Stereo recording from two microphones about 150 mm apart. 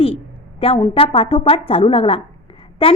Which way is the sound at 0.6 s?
40° left (ahead or behind).